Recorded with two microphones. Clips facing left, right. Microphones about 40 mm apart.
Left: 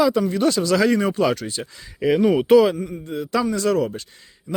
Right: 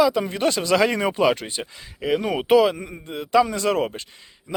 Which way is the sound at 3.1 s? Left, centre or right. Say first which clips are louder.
Left 3 dB; centre.